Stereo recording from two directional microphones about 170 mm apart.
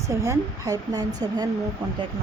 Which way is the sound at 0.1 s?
15° right (ahead or behind).